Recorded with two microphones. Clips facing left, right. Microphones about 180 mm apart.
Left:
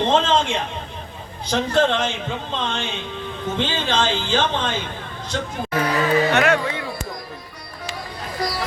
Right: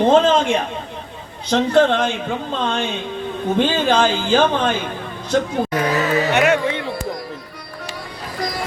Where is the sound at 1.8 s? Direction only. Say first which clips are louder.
Right 3 dB; 55° right (ahead or behind).